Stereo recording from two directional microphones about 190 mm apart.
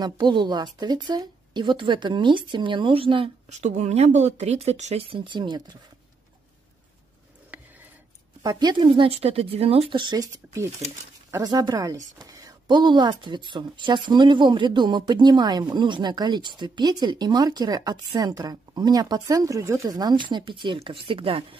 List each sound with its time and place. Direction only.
0.0 s speech: 25° right (ahead or behind)
7.5 s a sound: 10° right (ahead or behind)
8.4 s speech: 20° right (ahead or behind)